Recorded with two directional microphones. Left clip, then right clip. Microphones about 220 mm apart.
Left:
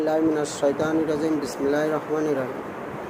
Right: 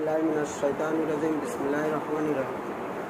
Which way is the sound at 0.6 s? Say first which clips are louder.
Left 6 dB; 50° left (ahead or behind).